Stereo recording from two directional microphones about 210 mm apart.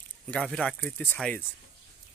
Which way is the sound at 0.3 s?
5° left (ahead or behind).